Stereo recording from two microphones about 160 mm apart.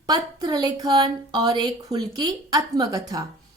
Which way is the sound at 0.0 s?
25° right (ahead or behind).